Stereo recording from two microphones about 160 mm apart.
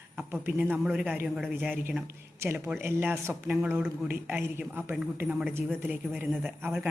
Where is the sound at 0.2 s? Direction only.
10° right (ahead or behind).